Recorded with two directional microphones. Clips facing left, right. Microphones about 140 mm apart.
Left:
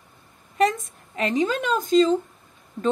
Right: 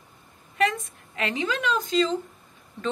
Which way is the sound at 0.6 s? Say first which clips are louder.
Left 4 dB; 40° left (ahead or behind).